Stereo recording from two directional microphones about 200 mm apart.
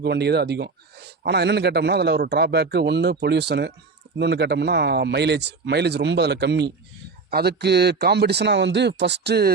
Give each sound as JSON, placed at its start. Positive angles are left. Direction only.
{"t": 0.0, "sound": "a man's voice", "side_deg": -55}